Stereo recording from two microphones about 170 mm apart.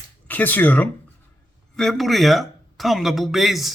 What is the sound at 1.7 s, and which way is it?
Speech, centre (ahead or behind).